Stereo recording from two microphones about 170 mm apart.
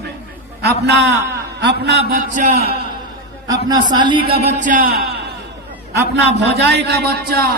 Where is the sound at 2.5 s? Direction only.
70° right (ahead or behind).